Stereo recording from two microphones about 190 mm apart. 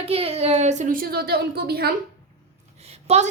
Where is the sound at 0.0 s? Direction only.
30° right (ahead or behind); by 1.9 s 55° right (ahead or behind).